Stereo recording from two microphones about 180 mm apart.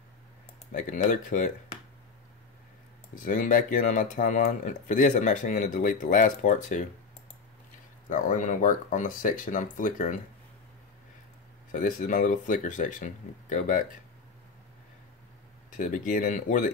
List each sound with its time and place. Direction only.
0.7 s speech: 45° left (ahead or behind)
3.2 s speech: 45° left (ahead or behind)
8.1 s speech: 45° left (ahead or behind)
11.7 s speech: 45° left (ahead or behind)
15.7 s speech: 45° left (ahead or behind)